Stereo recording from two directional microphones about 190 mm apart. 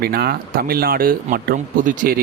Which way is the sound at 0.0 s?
55° right (ahead or behind).